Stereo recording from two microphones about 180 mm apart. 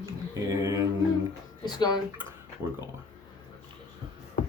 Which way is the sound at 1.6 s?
25° left (ahead or behind).